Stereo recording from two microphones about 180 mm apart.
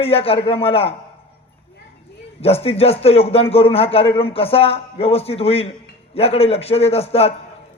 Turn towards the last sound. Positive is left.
turn(degrees=35)  # may be behind; listen again after turning